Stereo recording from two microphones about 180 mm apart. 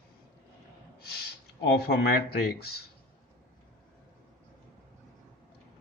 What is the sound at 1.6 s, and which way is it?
Speech, 60° left (ahead or behind).